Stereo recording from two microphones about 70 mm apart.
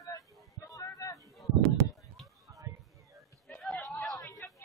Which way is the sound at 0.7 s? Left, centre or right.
Left.